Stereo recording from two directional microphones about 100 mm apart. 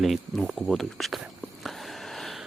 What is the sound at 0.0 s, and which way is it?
Speech, centre (ahead or behind).